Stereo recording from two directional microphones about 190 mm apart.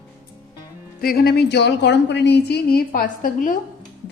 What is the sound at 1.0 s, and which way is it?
A woman's voice, 55° left (ahead or behind).